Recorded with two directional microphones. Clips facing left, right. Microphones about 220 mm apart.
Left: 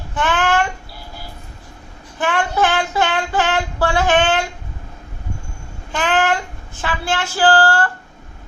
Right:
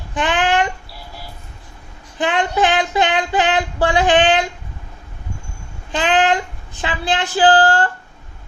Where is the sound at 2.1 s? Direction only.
20° right (ahead or behind).